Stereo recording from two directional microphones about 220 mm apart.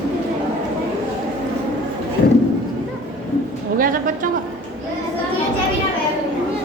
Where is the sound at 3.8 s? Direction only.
40° right (ahead or behind).